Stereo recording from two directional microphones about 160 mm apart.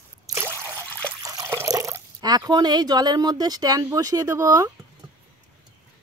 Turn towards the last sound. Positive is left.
turn(degrees=-20)  # may be behind; listen again after turning